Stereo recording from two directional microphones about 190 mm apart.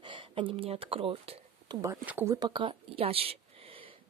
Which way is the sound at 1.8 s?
10° right (ahead or behind).